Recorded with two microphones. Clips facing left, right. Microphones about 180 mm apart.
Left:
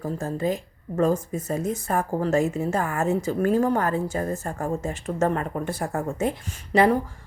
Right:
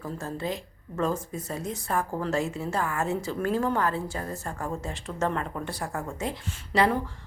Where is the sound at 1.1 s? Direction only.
20° left (ahead or behind).